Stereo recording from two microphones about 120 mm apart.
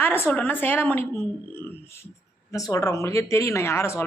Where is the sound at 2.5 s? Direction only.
30° left (ahead or behind).